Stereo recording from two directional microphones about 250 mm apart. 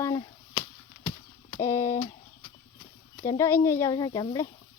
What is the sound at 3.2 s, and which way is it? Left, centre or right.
Speech, centre.